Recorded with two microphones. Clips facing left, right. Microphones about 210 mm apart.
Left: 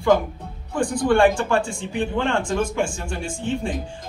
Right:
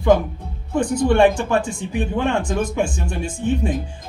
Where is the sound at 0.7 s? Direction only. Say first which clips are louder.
Right 2 dB; 25° right (ahead or behind).